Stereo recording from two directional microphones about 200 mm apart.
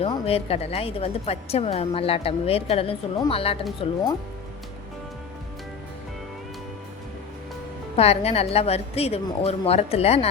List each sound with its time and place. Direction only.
0.0 s a woman's voice: 30° left (ahead or behind)
7.9 s a woman's voice: 30° left (ahead or behind)